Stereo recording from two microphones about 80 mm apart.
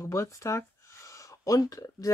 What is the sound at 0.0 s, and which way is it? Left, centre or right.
Speech, left.